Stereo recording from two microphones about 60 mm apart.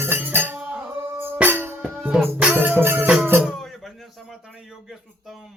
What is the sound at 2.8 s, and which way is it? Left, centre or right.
Music, right.